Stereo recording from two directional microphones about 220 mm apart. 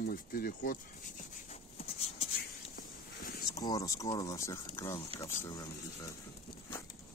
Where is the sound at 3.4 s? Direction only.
15° left (ahead or behind).